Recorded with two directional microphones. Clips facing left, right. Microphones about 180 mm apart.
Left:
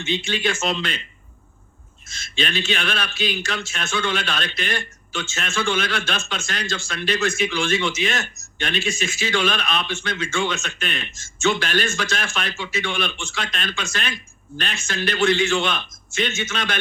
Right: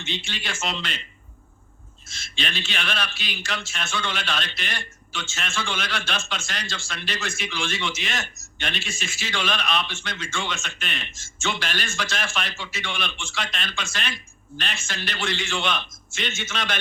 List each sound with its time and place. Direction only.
0.4 s a man's voice: 45° left (ahead or behind)
2.1 s a man's voice: 50° left (ahead or behind)